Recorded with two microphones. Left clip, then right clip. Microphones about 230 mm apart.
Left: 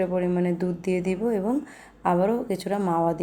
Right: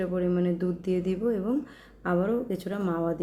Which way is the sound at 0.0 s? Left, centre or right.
Left.